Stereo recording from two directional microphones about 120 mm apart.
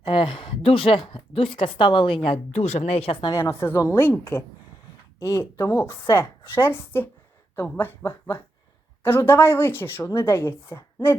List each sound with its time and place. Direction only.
0.0 s a woman's voice: 45° left (ahead or behind)
2.5 s speech: 70° left (ahead or behind); by 3.3 s 50° left (ahead or behind)
3.3 s a woman's voice: 25° left (ahead or behind)